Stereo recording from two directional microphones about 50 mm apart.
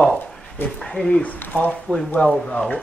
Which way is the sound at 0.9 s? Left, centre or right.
Centre.